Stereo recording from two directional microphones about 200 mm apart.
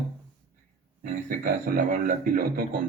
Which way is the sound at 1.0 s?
45° right (ahead or behind).